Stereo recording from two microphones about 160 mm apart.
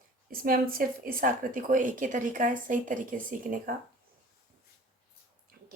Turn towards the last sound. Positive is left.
turn(degrees=-65)  # may be behind; listen again after turning